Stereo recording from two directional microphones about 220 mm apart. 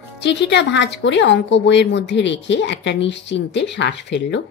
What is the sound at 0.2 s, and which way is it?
A woman's voice, 50° left (ahead or behind).